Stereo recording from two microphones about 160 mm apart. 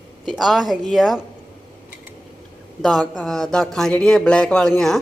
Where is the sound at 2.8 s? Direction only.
5° left (ahead or behind).